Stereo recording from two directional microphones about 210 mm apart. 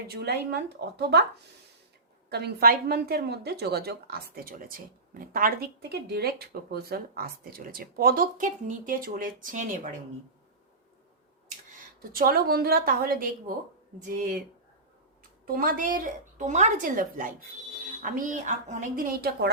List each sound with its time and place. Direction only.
0.1 s speech: 50° right (ahead or behind)
2.3 s speech: 45° right (ahead or behind)
12.1 s a woman's voice: 45° right (ahead or behind)
15.4 s a woman's voice: 40° right (ahead or behind)